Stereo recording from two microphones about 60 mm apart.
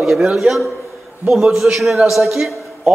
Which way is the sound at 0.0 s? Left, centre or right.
Centre.